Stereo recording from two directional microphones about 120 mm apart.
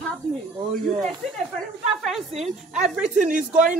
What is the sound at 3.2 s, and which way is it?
Speech, 90° right.